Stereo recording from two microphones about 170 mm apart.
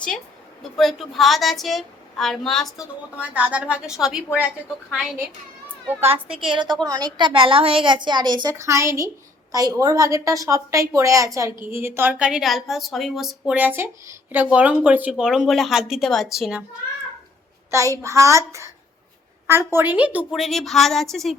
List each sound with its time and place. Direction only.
0.8 s a woman's voice: centre (ahead or behind)
6.4 s a woman's voice: 25° right (ahead or behind); by 16.6 s 5° right (ahead or behind)
17.7 s a woman's voice: 20° right (ahead or behind); by 21.3 s centre (ahead or behind)